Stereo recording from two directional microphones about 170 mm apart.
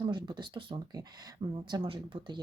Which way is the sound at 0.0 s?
25° right (ahead or behind).